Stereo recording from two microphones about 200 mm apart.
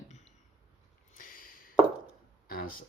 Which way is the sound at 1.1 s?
45° left (ahead or behind).